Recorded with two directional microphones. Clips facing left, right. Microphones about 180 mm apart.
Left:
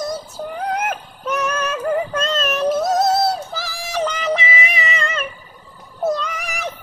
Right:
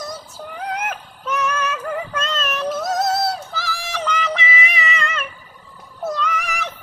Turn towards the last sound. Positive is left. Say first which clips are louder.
# right 2 dB
turn(degrees=40)  # may be behind; listen again after turning